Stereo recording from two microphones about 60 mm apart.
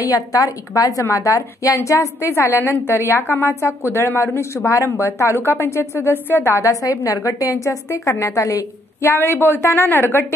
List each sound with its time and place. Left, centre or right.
0.0 s a woman's voice: left
1.0 s a woman's voice: left
4.9 s a woman's voice: left
6.6 s a woman's voice: left
9.0 s a woman's voice: left